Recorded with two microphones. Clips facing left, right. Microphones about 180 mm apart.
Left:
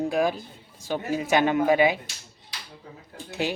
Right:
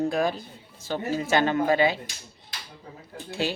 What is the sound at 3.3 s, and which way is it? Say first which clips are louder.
Speech: even; 15° left (ahead or behind).